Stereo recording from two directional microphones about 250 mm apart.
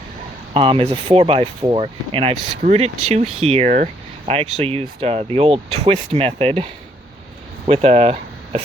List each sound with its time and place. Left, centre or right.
0.5 s speech: right
7.7 s speech: right